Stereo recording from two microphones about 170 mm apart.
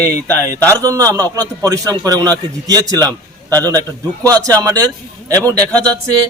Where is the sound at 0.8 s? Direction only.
20° right (ahead or behind).